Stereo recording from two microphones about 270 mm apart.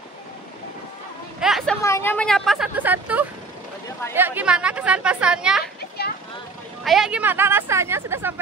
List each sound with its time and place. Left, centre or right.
1.4 s a woman's voice: centre
5.8 s children playing: left
6.8 s speech: centre